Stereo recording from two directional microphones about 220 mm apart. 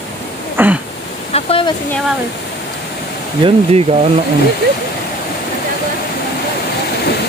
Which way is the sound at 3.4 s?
25° right (ahead or behind).